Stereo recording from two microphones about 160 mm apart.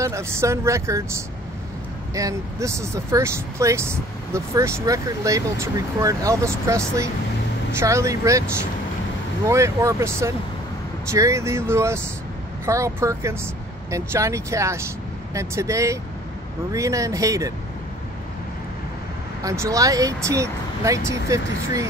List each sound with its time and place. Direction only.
0.0 s speech: 20° right (ahead or behind)
7.8 s speech: 20° right (ahead or behind)
9.5 s speech: 20° right (ahead or behind)
19.4 s speech: 20° right (ahead or behind)